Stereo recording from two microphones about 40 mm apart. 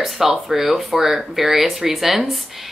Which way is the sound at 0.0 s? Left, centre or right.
Centre.